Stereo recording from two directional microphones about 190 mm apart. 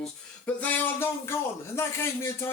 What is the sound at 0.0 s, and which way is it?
Speech, 10° left (ahead or behind).